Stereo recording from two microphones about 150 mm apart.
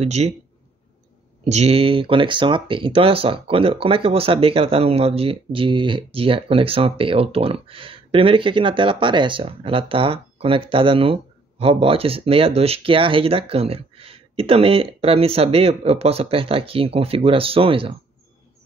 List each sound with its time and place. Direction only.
0.0 s speech: 45° right (ahead or behind)
1.4 s speech: 45° right (ahead or behind)